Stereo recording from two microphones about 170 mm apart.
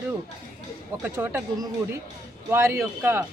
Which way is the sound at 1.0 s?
10° right (ahead or behind).